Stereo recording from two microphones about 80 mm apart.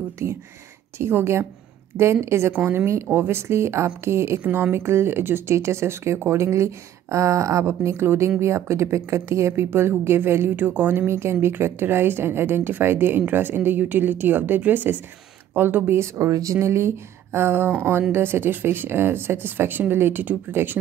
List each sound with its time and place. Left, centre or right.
0.9 s a woman's voice: right
4.4 s a woman's voice: right